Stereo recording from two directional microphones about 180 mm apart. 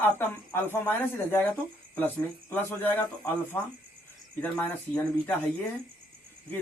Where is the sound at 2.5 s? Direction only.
10° left (ahead or behind).